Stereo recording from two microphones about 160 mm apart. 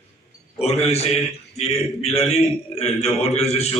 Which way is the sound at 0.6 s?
40° left (ahead or behind).